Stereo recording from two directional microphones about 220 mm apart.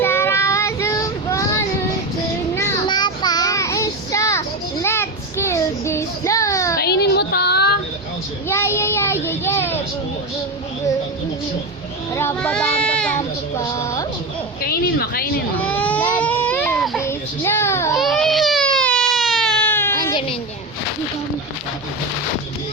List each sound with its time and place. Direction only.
0.0 s child singing: 10° left (ahead or behind)
2.6 s child singing: 20° left (ahead or behind)
6.7 s a sound: 45° left (ahead or behind)
8.4 s child singing: 10° left (ahead or behind)
12.1 s child singing: 10° left (ahead or behind)
14.6 s a sound: 45° left (ahead or behind)
15.6 s baby cry: 5° left (ahead or behind)
17.0 s child singing: 10° left (ahead or behind)
17.9 s baby cry: centre (ahead or behind)